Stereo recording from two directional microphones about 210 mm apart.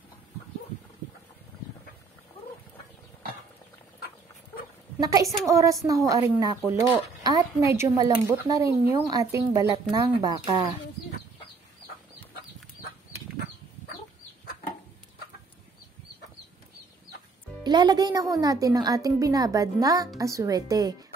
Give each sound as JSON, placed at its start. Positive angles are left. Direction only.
{"t": 5.0, "sound": "a woman's voice", "side_deg": -15}
{"t": 17.6, "sound": "a woman's voice", "side_deg": -20}